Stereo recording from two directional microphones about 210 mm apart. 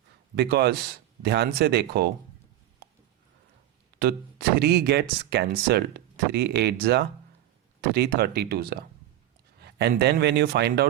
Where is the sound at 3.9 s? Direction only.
50° right (ahead or behind).